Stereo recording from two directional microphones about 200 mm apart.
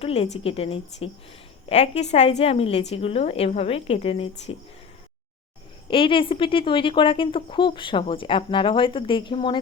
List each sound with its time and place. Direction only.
0.0 s a woman's voice: 30° left (ahead or behind)
5.9 s a woman's voice: 25° left (ahead or behind)